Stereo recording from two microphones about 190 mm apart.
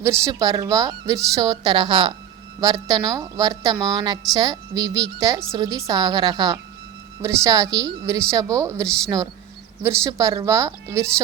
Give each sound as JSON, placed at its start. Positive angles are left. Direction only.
{"t": 0.0, "sound": "a woman's voice", "side_deg": -15}